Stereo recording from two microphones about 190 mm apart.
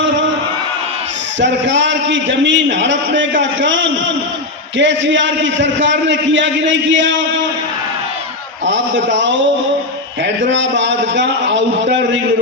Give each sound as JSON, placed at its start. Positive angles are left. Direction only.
{"t": 1.4, "sound": "a man's voice", "side_deg": -70}
{"t": 8.6, "sound": "a man's voice", "side_deg": -70}
{"t": 10.4, "sound": "a man's voice", "side_deg": -70}